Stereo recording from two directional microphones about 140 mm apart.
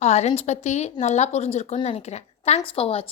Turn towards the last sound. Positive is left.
turn(degrees=45)  # may be behind; listen again after turning